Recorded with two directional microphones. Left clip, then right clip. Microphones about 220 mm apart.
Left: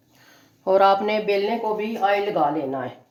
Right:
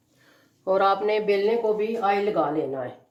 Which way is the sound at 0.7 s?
45° left (ahead or behind).